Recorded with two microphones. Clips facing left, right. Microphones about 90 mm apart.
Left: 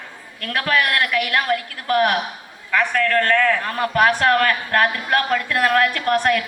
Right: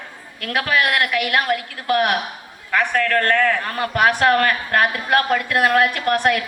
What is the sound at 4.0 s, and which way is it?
A woman's voice, 20° right (ahead or behind).